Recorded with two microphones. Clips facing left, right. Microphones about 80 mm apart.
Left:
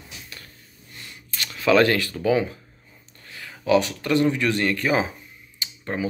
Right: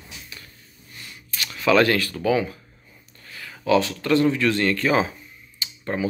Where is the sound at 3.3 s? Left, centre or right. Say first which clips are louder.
Even; left.